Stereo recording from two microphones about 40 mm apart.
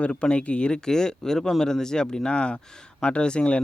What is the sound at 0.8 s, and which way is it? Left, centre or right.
Speech, centre.